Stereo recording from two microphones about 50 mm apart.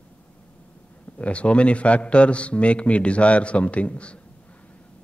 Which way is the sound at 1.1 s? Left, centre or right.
Left.